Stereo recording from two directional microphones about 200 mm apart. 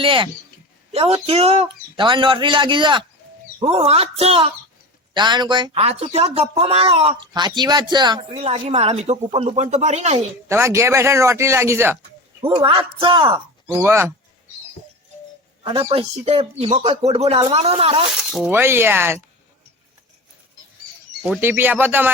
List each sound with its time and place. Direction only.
0.0 s speech: 25° right (ahead or behind)
10.5 s a woman's voice: 15° right (ahead or behind)
12.6 s speech: 25° right (ahead or behind)
15.6 s speech: 25° right (ahead or behind)
18.3 s speech: 5° right (ahead or behind)
21.2 s speech: 10° right (ahead or behind)